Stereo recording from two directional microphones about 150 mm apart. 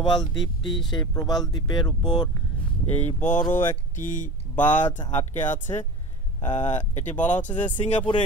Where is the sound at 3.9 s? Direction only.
60° left (ahead or behind).